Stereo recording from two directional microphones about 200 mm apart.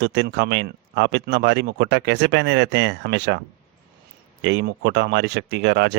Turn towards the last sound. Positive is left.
turn(degrees=-60)  # may be behind; listen again after turning